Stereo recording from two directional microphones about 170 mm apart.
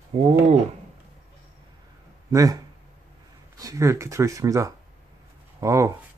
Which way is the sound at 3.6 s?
20° right (ahead or behind).